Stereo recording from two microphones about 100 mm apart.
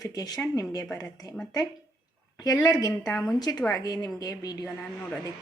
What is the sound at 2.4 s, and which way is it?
Speech, 40° left (ahead or behind).